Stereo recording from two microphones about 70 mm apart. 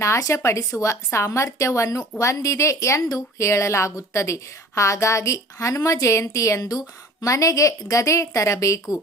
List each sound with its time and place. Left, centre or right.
0.0 s speech: left